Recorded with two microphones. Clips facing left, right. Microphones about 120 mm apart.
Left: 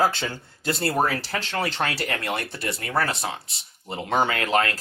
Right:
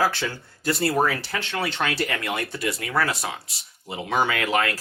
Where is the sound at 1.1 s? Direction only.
35° left (ahead or behind).